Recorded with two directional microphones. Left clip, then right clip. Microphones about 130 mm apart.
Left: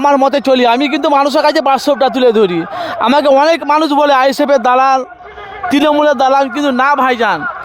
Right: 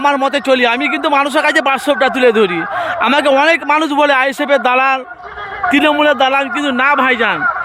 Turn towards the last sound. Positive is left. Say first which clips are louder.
# left 1 dB
turn(degrees=20)  # may be behind; listen again after turning